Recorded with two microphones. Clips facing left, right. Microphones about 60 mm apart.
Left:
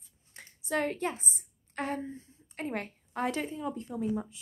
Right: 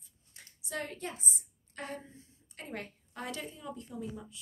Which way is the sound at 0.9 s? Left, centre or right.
Left.